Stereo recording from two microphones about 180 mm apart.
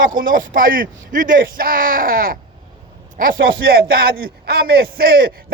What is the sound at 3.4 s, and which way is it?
Speech, 60° right (ahead or behind).